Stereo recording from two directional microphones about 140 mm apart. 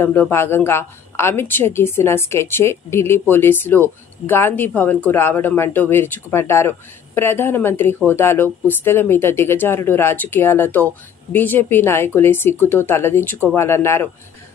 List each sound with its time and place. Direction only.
0.0 s a woman's voice: 15° left (ahead or behind)